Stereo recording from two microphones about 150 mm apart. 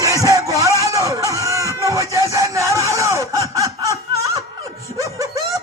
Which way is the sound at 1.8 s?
20° right (ahead or behind).